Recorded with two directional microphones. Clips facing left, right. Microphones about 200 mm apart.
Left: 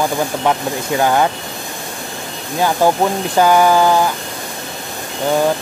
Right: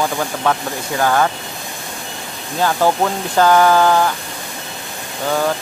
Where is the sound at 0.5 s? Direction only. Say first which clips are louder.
Left 1 dB; 20° left (ahead or behind).